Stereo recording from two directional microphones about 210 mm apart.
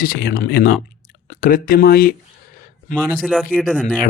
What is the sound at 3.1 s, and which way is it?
Speech, 5° right (ahead or behind).